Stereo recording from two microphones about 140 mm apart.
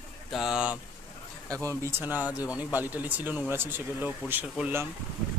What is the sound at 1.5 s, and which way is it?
Speech, 20° right (ahead or behind).